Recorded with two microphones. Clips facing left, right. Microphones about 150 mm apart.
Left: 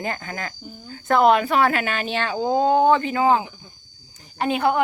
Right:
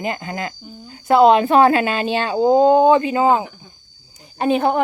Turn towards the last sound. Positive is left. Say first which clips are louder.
# right 4 dB
turn(degrees=-25)  # may be behind; listen again after turning